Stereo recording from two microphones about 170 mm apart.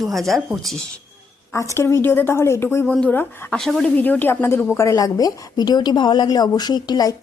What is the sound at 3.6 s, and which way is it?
A woman's voice, centre (ahead or behind).